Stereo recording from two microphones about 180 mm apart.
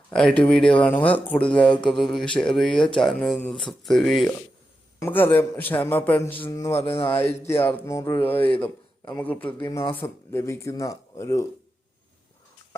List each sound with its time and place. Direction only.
0.1 s speech: 5° left (ahead or behind)